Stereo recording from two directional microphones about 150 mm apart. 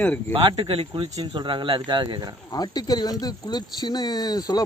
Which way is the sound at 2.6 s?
25° left (ahead or behind).